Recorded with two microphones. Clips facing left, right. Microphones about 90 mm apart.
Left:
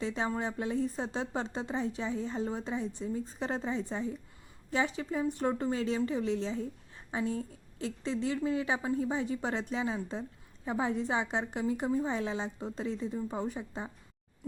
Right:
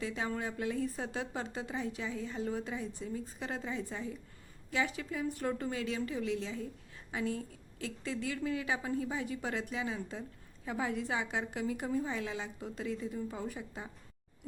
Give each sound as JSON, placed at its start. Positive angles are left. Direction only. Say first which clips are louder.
{"t": 0.0, "sound": "a woman's voice", "louder": "left 4 dB", "side_deg": 30}